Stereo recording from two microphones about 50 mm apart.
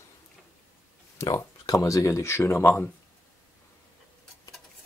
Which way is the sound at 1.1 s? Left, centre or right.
Left.